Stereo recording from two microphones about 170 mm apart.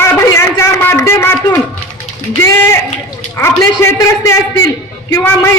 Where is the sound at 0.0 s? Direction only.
15° left (ahead or behind).